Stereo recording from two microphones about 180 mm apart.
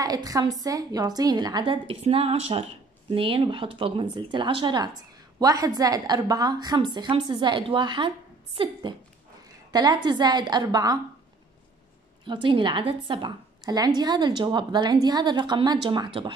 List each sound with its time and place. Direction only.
0.0 s a woman's voice: 20° right (ahead or behind)
12.3 s a woman's voice: 25° right (ahead or behind)